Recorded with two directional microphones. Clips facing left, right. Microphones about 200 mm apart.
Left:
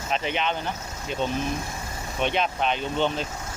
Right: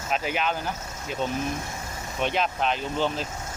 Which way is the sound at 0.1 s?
5° right (ahead or behind).